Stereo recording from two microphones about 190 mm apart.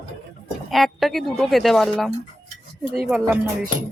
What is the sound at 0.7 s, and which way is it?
Speech, centre (ahead or behind).